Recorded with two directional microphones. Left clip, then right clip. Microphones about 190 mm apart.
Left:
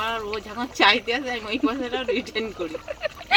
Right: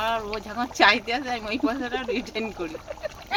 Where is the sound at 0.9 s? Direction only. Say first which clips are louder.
Left 3 dB; 25° right (ahead or behind).